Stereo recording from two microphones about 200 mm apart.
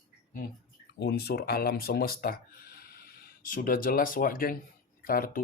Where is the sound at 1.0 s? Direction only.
55° left (ahead or behind).